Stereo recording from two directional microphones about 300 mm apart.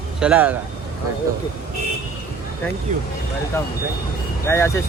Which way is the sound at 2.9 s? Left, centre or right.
Right.